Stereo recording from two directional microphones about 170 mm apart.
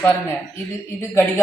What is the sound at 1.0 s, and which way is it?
Speech, 15° left (ahead or behind).